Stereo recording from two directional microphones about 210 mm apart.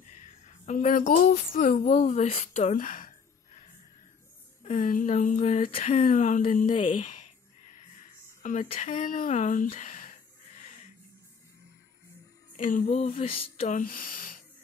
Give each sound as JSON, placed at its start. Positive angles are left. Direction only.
{"t": 0.7, "sound": "speech", "side_deg": 40}
{"t": 4.6, "sound": "speech", "side_deg": 40}
{"t": 5.9, "sound": "speech", "side_deg": 35}
{"t": 8.4, "sound": "a sound", "side_deg": 35}
{"t": 12.5, "sound": "speech", "side_deg": 40}